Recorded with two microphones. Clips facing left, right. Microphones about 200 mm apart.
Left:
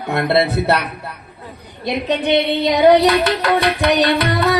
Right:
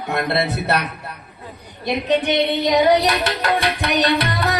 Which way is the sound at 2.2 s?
60° left (ahead or behind).